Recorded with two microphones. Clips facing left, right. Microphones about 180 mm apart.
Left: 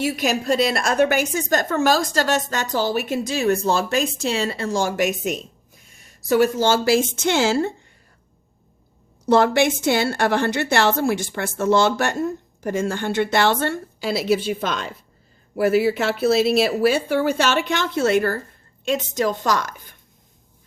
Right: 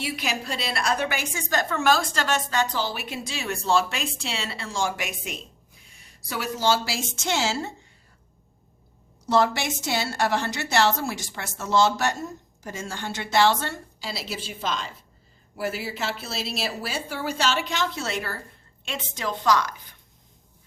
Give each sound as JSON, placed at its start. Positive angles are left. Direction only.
{"t": 0.0, "sound": "a woman's voice", "side_deg": 45}
{"t": 9.2, "sound": "a woman's voice", "side_deg": 55}